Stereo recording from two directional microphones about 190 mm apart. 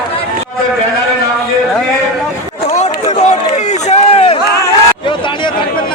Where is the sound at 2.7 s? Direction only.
35° left (ahead or behind).